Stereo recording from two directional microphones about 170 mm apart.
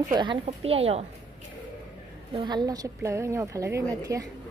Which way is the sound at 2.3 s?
25° right (ahead or behind).